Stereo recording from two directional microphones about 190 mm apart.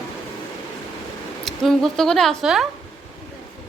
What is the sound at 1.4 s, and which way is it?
Speech, centre (ahead or behind).